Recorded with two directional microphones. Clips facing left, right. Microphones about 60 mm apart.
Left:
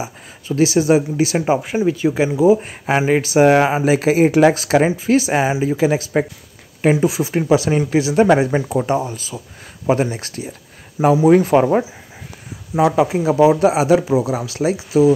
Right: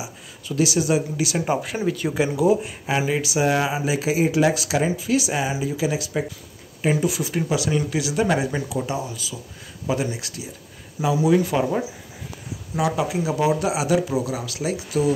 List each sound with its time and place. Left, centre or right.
0.0 s a man's voice: left
2.6 s a man's voice: left